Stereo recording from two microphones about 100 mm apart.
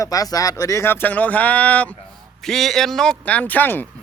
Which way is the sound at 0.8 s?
20° left (ahead or behind).